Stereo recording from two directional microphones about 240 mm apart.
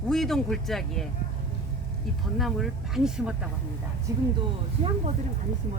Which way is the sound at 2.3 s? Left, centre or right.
Centre.